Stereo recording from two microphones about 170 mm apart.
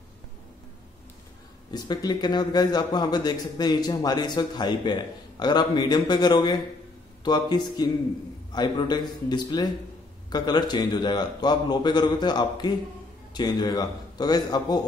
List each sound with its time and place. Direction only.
1.7 s a man's voice: 25° left (ahead or behind)